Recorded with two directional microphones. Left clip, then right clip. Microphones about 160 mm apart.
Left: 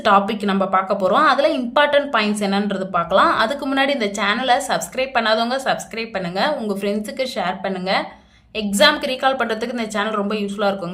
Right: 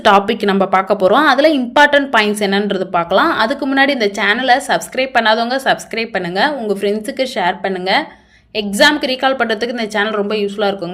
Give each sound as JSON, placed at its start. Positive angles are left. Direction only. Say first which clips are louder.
{"t": 0.0, "sound": "a woman's voice", "louder": "right 5 dB", "side_deg": -30}